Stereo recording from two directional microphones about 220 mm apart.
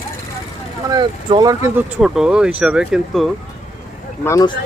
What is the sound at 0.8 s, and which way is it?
Speech, 20° right (ahead or behind).